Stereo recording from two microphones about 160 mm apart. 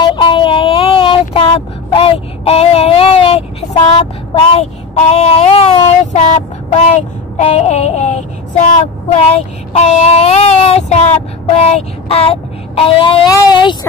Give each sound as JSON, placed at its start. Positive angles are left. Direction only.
{"t": 0.0, "sound": "speech", "side_deg": 30}
{"t": 10.9, "sound": "child singing", "side_deg": 40}
{"t": 13.3, "sound": "speech", "side_deg": 30}